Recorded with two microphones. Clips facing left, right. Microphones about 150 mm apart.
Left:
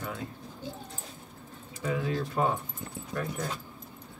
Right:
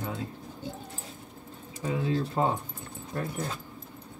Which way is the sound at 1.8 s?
30° right (ahead or behind).